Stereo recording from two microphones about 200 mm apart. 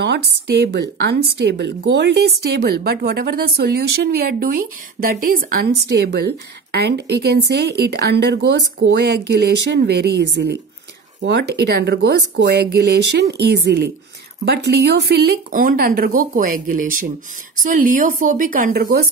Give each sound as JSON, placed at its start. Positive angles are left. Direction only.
{"t": 0.7, "sound": "a woman's voice", "side_deg": -55}